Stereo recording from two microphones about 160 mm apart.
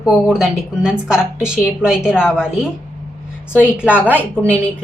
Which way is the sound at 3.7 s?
10° right (ahead or behind).